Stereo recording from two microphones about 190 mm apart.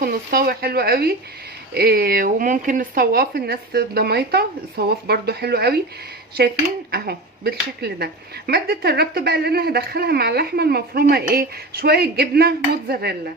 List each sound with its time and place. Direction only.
0.0 s speech: 50° right (ahead or behind)
6.9 s speech: 55° right (ahead or behind)